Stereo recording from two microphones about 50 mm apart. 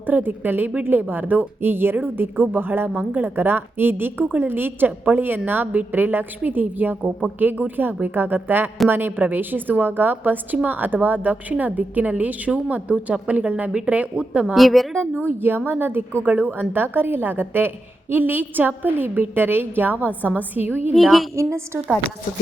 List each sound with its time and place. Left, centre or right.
0.0 s a woman's voice: right
14.2 s a woman's voice: centre
14.5 s a woman's voice: centre
14.9 s a woman's voice: right
20.9 s a woman's voice: centre
21.3 s a woman's voice: right